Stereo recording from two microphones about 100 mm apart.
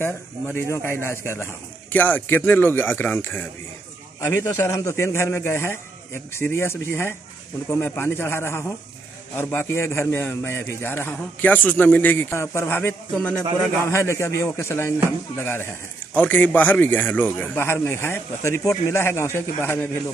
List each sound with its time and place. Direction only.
0.0 s speech: 25° left (ahead or behind)